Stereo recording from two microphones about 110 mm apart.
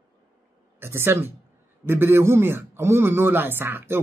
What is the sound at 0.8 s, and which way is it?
Speech, 20° right (ahead or behind).